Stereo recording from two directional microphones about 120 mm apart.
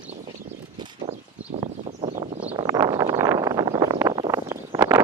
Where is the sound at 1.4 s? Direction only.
65° right (ahead or behind).